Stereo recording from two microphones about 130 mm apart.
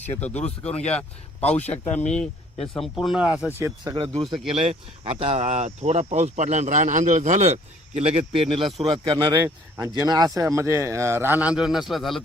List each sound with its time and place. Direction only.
0.0 s speech: 10° left (ahead or behind); by 3.5 s 10° right (ahead or behind)
3.9 s a man's voice: 40° right (ahead or behind); by 12.2 s centre (ahead or behind)